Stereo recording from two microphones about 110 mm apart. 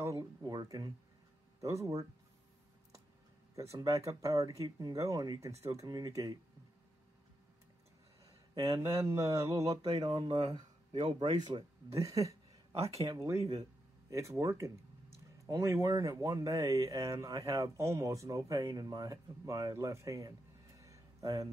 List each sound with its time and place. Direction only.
0.0 s speech: 30° right (ahead or behind)
3.5 s speech: 30° right (ahead or behind)
8.5 s speech: 35° right (ahead or behind)
9.9 s speech: 45° right (ahead or behind)